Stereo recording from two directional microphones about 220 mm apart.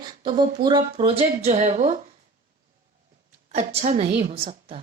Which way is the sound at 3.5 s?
30° right (ahead or behind).